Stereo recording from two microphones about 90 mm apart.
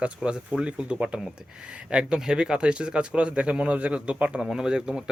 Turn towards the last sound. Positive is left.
turn(degrees=-5)  # may be behind; listen again after turning